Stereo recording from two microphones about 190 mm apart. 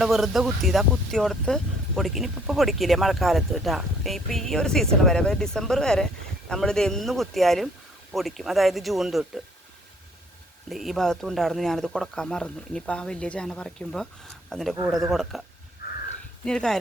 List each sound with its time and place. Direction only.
0.0 s speech: centre (ahead or behind)
10.7 s speech: centre (ahead or behind)